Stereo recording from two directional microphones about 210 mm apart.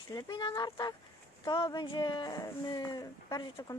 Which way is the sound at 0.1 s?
20° left (ahead or behind).